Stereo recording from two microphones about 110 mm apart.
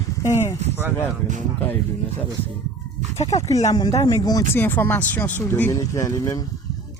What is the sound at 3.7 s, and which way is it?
Speech, 35° left (ahead or behind).